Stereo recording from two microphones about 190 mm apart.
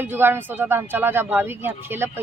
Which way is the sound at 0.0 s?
10° right (ahead or behind).